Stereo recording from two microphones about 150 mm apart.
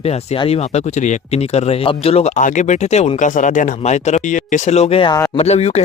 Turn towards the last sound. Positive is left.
turn(degrees=45)  # may be behind; listen again after turning